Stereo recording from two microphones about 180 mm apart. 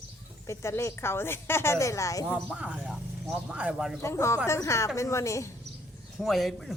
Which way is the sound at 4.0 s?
15° left (ahead or behind).